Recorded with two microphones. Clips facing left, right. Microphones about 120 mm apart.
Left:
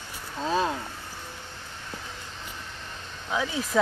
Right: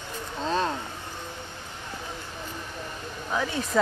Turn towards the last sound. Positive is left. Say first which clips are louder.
# right 1 dB
turn(degrees=5)  # may be behind; listen again after turning